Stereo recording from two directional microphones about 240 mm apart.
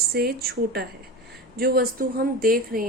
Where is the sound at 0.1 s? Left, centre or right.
Right.